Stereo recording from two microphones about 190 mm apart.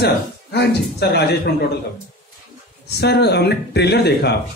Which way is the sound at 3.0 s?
60° left (ahead or behind).